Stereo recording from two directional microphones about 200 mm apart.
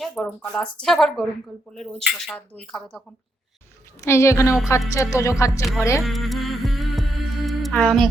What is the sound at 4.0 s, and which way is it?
A woman's voice, 15° left (ahead or behind).